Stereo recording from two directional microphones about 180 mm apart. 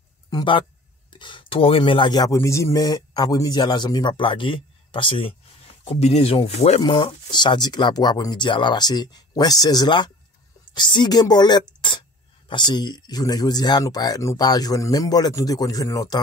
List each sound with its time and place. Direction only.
0.3 s speech: 25° left (ahead or behind)